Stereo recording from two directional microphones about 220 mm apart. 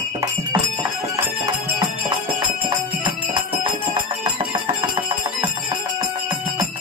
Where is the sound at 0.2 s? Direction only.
15° right (ahead or behind).